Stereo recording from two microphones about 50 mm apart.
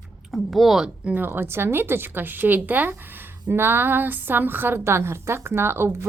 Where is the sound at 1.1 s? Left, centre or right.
Right.